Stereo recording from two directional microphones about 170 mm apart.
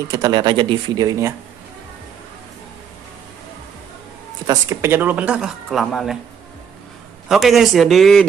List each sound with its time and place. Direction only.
0.1 s speech: 25° right (ahead or behind)
4.5 s speech: 15° right (ahead or behind); by 6.1 s centre (ahead or behind)
7.2 s a man's voice: centre (ahead or behind)